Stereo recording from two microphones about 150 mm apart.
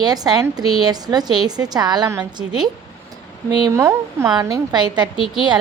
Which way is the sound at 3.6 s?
20° right (ahead or behind).